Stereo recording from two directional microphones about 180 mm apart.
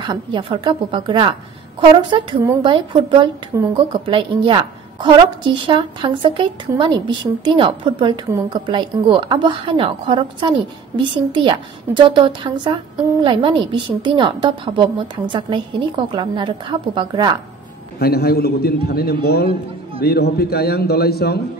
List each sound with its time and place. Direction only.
0.0 s a woman's voice: 25° right (ahead or behind)
17.9 s a man's voice: 60° left (ahead or behind)